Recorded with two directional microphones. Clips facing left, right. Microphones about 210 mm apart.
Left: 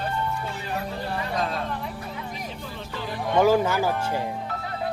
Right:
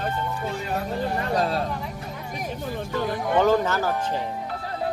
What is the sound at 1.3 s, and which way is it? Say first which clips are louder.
Vehicle: right 4 dB; 35° right (ahead or behind).